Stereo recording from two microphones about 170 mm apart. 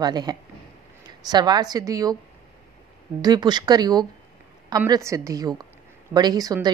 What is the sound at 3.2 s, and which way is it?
A woman's voice, 25° right (ahead or behind).